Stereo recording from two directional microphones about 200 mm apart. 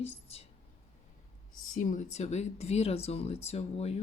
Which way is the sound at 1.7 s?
40° left (ahead or behind).